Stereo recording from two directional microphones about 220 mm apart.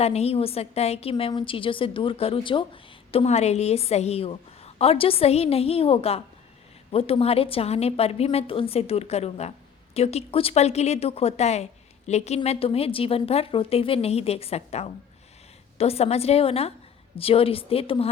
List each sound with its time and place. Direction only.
0.0 s speech: 30° left (ahead or behind)